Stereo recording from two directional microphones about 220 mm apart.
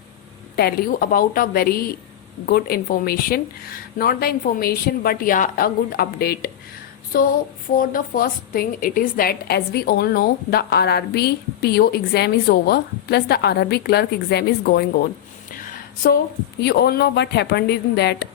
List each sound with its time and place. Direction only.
0.5 s a woman's voice: 45° left (ahead or behind)
7.1 s child singing: 40° left (ahead or behind)
7.8 s a woman's voice: 40° left (ahead or behind)
16.6 s a woman's voice: 50° left (ahead or behind)